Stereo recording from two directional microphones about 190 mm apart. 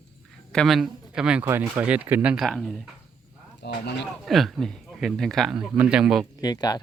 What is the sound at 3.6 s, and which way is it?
Speech, 60° left (ahead or behind).